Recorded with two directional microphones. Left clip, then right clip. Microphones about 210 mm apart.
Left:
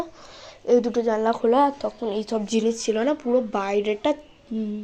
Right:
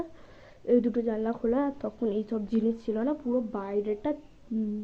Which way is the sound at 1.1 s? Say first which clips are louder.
Left 9 dB; 5° left (ahead or behind).